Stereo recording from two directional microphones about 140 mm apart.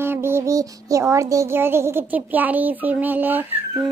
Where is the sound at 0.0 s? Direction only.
15° right (ahead or behind).